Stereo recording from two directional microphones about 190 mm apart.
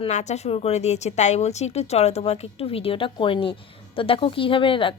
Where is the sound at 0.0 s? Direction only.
35° left (ahead or behind).